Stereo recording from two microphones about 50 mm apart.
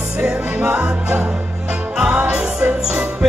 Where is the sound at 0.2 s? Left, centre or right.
Right.